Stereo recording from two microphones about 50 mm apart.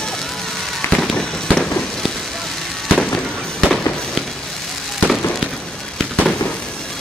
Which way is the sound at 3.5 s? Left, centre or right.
Centre.